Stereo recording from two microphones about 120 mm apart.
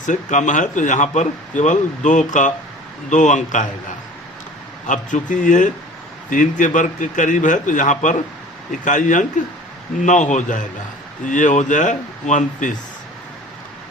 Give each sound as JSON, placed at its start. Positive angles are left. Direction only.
{"t": 0.0, "sound": "speech", "side_deg": 90}
{"t": 4.9, "sound": "speech", "side_deg": 90}